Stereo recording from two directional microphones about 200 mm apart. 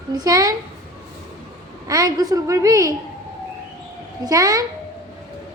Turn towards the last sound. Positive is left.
turn(degrees=-15)  # may be behind; listen again after turning